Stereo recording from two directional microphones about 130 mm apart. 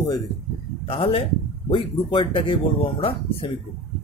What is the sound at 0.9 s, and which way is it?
Speech, 45° left (ahead or behind).